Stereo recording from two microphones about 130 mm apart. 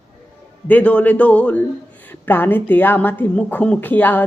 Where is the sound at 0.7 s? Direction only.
10° left (ahead or behind).